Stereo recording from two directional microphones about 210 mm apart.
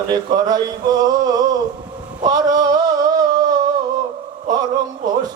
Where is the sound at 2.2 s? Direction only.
20° right (ahead or behind).